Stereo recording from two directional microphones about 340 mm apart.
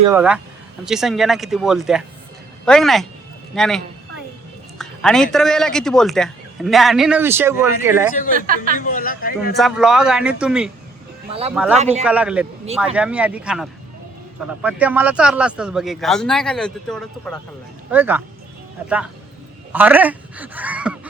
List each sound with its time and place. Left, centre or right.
0.1 s a man's voice: centre
8.3 s speech: right
8.7 s a man's voice: left
9.6 s a man's voice: centre
11.3 s speech: centre
11.5 s a man's voice: centre
19.7 s a man's voice: centre